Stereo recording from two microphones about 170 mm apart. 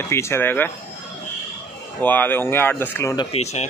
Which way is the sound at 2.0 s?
10° left (ahead or behind).